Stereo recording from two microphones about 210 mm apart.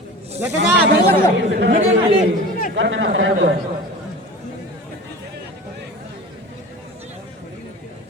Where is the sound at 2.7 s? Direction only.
65° right (ahead or behind).